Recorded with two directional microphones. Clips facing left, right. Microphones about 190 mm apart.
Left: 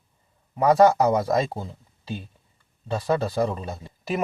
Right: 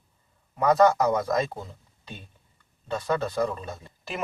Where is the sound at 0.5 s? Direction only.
30° left (ahead or behind).